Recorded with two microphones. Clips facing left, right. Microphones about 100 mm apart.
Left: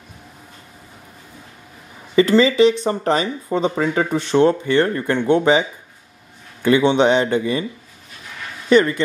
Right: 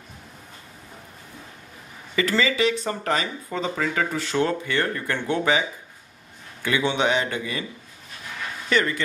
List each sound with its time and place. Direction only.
2.1 s speech: 25° left (ahead or behind)
8.6 s speech: 20° left (ahead or behind)